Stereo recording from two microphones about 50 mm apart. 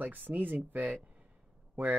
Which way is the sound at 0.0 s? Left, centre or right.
Right.